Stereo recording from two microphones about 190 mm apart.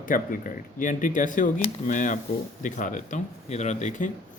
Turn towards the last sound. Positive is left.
turn(degrees=40)  # may be behind; listen again after turning